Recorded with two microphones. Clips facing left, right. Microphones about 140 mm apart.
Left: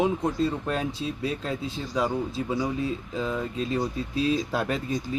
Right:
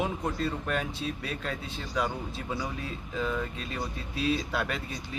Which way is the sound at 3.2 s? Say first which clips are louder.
Left 2 dB; 30° left (ahead or behind).